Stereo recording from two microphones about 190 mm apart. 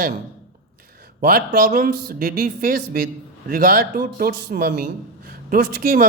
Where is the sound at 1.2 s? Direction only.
50° right (ahead or behind).